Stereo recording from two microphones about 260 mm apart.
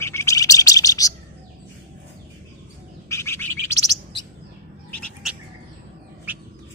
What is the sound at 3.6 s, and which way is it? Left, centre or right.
Bird, right.